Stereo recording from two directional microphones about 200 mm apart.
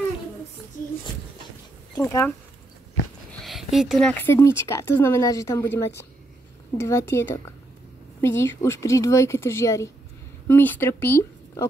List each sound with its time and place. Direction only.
2.0 s speech: 15° left (ahead or behind)
3.4 s speech: centre (ahead or behind)